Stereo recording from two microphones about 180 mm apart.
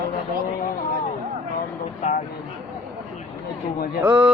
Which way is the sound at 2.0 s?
35° left (ahead or behind).